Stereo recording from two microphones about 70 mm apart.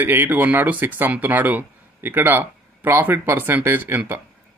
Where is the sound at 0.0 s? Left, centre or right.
Right.